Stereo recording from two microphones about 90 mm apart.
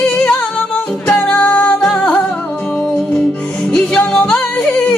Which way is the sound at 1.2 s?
20° left (ahead or behind).